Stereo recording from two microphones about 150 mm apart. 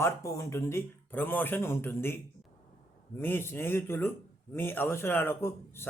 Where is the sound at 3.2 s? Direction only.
15° left (ahead or behind).